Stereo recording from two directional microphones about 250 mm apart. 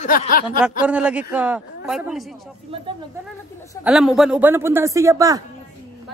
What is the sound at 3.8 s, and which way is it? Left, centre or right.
A woman's voice, centre.